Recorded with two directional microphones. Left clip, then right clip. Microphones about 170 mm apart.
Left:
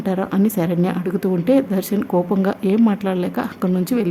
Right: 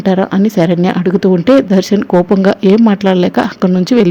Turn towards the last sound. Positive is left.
turn(degrees=-30)  # may be behind; listen again after turning